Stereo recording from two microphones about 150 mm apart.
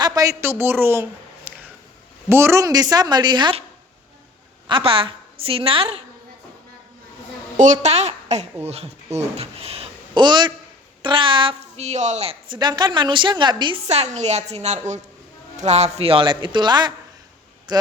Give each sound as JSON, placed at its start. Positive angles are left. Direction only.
{"t": 0.0, "sound": "a woman's voice", "side_deg": -25}
{"t": 1.5, "sound": "a sound", "side_deg": -15}
{"t": 2.3, "sound": "a woman's voice", "side_deg": -20}
{"t": 4.6, "sound": "a woman's voice", "side_deg": -35}
{"t": 7.5, "sound": "a woman's voice", "side_deg": -55}
{"t": 12.5, "sound": "a woman's voice", "side_deg": -30}
{"t": 13.8, "sound": "a woman's voice", "side_deg": -45}